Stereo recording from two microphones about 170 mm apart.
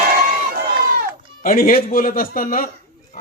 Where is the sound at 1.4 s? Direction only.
55° left (ahead or behind).